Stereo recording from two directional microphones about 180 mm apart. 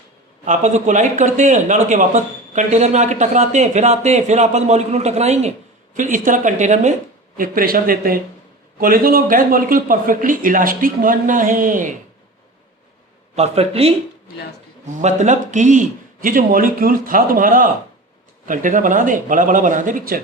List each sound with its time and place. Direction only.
0.4 s speech: 45° right (ahead or behind)
7.3 s speech: 50° right (ahead or behind)
13.3 s speech: 35° right (ahead or behind)
15.0 s speech: 40° right (ahead or behind)